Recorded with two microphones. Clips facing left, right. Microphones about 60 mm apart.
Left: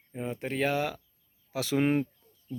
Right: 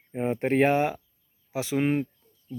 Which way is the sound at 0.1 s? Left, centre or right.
Right.